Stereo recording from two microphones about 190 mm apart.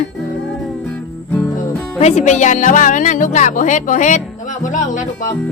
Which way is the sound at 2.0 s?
35° left (ahead or behind).